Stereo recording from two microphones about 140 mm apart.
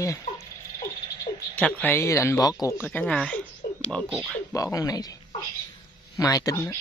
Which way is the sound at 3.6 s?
90° left.